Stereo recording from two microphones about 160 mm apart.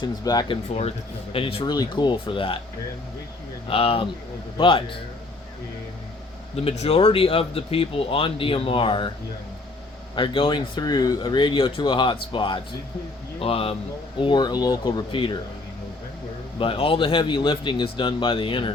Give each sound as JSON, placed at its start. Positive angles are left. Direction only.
{"t": 0.0, "sound": "speech", "side_deg": 25}
{"t": 3.7, "sound": "speech", "side_deg": 35}
{"t": 6.6, "sound": "speech", "side_deg": 40}
{"t": 10.2, "sound": "speech", "side_deg": 30}
{"t": 16.6, "sound": "speech", "side_deg": 35}